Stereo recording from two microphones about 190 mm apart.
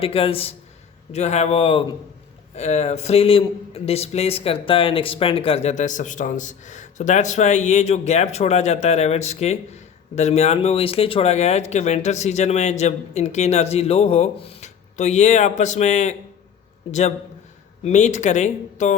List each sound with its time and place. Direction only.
0.0 s a man's voice: 30° left (ahead or behind)
17.8 s a man's voice: 40° left (ahead or behind)